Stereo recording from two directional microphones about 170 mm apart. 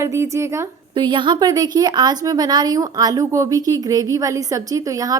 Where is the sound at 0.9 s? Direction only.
30° right (ahead or behind).